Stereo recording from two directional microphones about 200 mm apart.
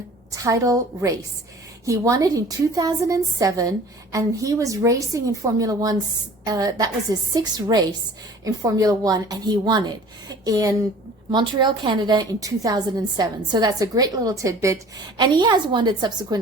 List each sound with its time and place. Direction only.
0.3 s a woman's voice: 15° right (ahead or behind)